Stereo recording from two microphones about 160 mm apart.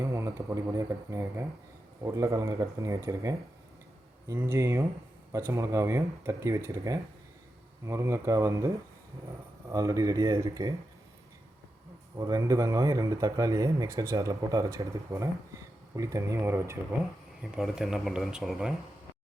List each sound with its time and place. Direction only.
0.0 s speech: 20° right (ahead or behind)
9.7 s speech: 20° right (ahead or behind)
12.1 s speech: 20° right (ahead or behind)
17.5 s speech: centre (ahead or behind)